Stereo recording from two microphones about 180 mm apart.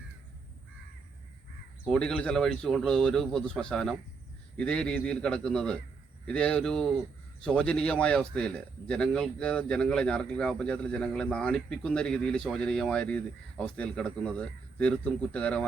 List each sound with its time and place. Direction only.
1.8 s a man's voice: 5° left (ahead or behind)